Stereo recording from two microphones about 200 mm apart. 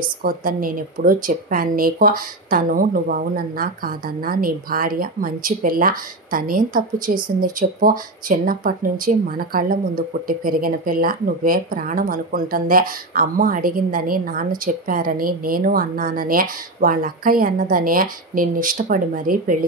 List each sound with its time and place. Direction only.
0.0 s speech: 45° right (ahead or behind)